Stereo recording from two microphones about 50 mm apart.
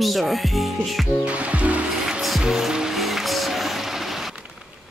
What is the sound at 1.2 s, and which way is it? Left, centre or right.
Music, right.